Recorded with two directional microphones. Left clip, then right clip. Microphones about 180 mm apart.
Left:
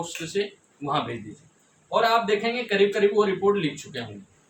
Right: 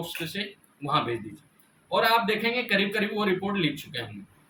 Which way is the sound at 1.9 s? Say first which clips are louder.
Left 2 dB; 15° left (ahead or behind).